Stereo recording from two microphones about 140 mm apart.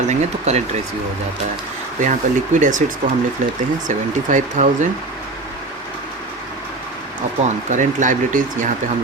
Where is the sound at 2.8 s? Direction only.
60° right (ahead or behind).